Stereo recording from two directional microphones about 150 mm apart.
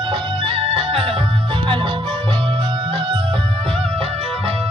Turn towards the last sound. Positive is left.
turn(degrees=-40)  # may be behind; listen again after turning